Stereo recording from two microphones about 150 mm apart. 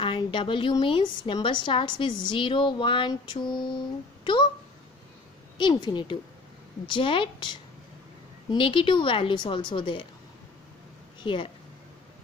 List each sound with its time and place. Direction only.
0.0 s a woman's voice: 35° left (ahead or behind)
5.6 s a woman's voice: 30° left (ahead or behind)
11.1 s speech: 35° left (ahead or behind)